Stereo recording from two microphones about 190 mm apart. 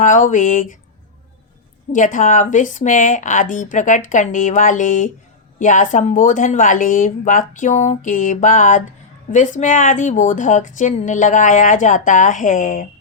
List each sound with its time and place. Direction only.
0.0 s speech: 45° left (ahead or behind)
1.9 s a woman's voice: 45° left (ahead or behind)